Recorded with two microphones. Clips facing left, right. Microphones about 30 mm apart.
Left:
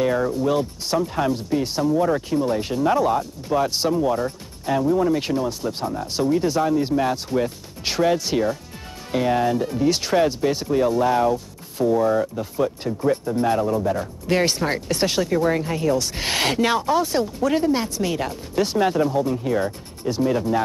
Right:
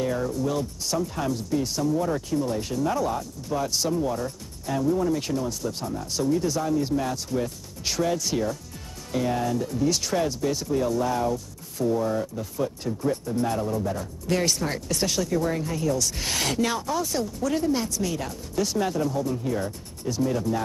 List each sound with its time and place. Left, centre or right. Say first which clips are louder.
0.0 s speech: left 6 dB; left